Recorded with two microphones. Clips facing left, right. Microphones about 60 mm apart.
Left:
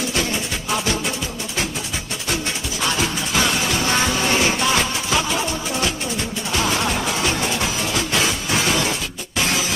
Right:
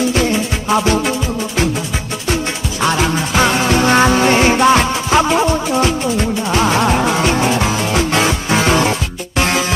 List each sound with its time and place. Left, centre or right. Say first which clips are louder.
0.1 s music: right 7 dB; right
2.8 s music: right 7 dB; right